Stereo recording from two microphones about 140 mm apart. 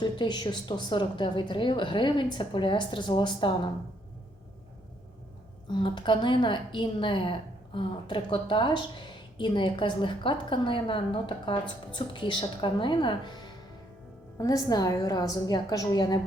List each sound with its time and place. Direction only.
0.0 s a woman's voice: 30° left (ahead or behind)
5.6 s a woman's voice: 35° left (ahead or behind)